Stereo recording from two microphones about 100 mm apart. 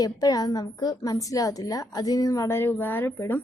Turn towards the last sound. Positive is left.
turn(degrees=20)  # may be behind; listen again after turning